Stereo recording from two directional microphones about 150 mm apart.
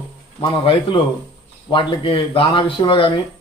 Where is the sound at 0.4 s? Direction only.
35° left (ahead or behind).